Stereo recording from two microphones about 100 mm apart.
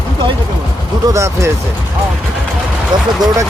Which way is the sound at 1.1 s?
30° right (ahead or behind).